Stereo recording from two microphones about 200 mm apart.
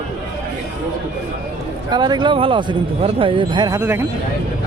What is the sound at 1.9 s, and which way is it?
Speech, 20° right (ahead or behind).